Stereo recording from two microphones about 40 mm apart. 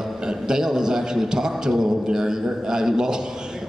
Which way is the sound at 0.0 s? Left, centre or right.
Centre.